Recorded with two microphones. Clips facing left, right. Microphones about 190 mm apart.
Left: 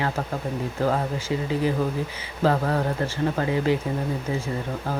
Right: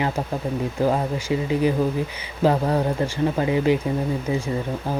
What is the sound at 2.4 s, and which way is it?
Speech, 15° right (ahead or behind).